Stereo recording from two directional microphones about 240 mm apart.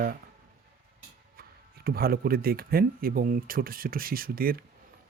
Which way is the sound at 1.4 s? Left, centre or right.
Right.